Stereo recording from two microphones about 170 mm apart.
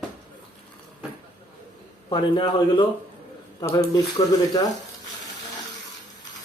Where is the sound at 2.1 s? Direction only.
30° left (ahead or behind).